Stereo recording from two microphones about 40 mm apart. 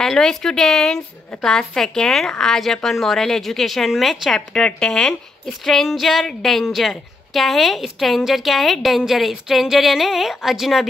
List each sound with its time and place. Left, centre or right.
0.0 s a woman's voice: centre
1.8 s a woman's voice: centre
4.6 s a woman's voice: centre
8.5 s a woman's voice: centre